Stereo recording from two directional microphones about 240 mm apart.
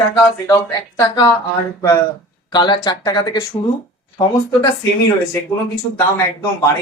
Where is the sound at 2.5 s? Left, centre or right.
Centre.